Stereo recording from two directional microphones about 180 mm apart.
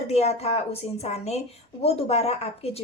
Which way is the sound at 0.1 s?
35° left (ahead or behind).